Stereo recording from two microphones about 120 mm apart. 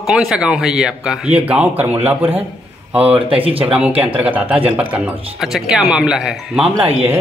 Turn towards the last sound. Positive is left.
turn(degrees=-55)  # may be behind; listen again after turning